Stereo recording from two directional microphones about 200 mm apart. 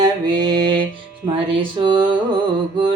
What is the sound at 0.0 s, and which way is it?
Mantra, 20° right (ahead or behind).